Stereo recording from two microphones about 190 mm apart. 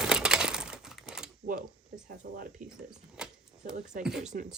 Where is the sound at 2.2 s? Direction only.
60° right (ahead or behind).